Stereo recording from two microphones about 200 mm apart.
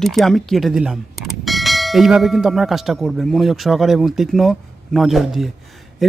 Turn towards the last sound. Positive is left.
turn(degrees=0)  # may be behind; listen again after turning